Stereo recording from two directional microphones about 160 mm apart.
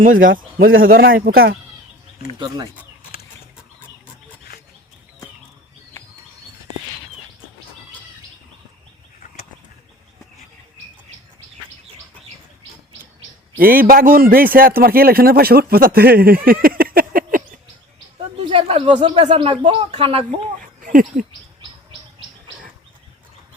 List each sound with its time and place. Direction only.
0.0 s a man's voice: 60° right (ahead or behind)
13.6 s a man's voice: 65° right (ahead or behind)
18.5 s speech: 30° right (ahead or behind)
20.6 s speech: 60° right (ahead or behind)